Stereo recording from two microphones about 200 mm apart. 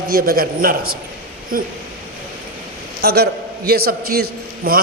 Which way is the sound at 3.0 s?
50° right (ahead or behind).